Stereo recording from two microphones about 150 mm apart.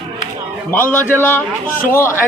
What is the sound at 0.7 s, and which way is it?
A man's voice, 15° left (ahead or behind).